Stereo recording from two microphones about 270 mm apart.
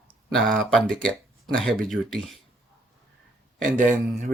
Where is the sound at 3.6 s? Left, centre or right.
Right.